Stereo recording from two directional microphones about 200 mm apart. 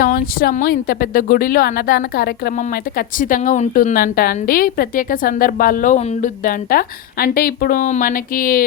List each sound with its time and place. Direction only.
0.0 s speech: 45° left (ahead or behind)